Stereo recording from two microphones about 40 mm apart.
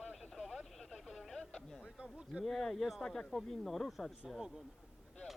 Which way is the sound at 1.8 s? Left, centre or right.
Right.